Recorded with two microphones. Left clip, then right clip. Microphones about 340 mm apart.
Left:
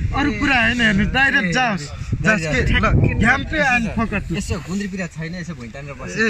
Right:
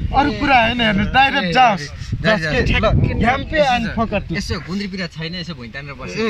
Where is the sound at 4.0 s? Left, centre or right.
Centre.